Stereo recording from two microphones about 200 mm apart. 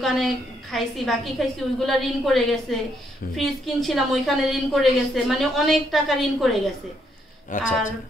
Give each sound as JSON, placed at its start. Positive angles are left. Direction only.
{"t": 0.0, "sound": "a woman's voice", "side_deg": 0}
{"t": 7.5, "sound": "speech", "side_deg": 40}